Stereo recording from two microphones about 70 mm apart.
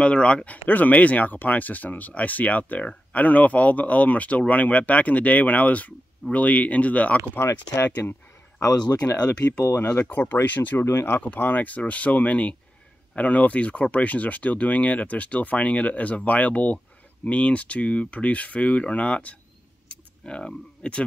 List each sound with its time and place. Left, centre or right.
0.0 s speech: centre
7.3 s speech: left
10.9 s speech: left
11.1 s speech: left
19.9 s a sound: centre